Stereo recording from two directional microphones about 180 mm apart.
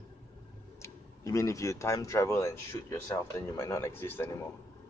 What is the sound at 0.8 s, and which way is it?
Speech, 15° left (ahead or behind).